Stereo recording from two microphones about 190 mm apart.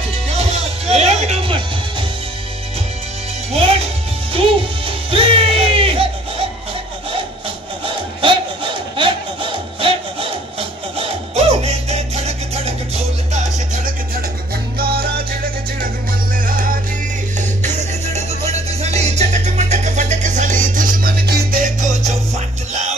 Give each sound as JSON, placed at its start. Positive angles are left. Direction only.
{"t": 0.3, "sound": "music", "side_deg": -35}
{"t": 4.3, "sound": "music", "side_deg": -30}
{"t": 7.8, "sound": "a sound", "side_deg": -25}
{"t": 11.0, "sound": "music", "side_deg": -35}
{"t": 14.8, "sound": "music", "side_deg": -55}
{"t": 17.4, "sound": "music", "side_deg": -35}